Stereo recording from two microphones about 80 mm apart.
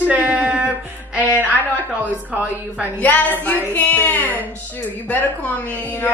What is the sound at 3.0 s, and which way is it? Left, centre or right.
A woman's voice, left.